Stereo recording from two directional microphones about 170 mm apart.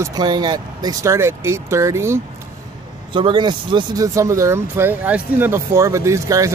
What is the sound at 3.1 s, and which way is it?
Speech, 30° right (ahead or behind).